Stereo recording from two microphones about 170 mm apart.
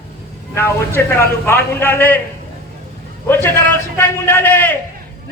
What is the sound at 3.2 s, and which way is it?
A man's voice, 10° left (ahead or behind).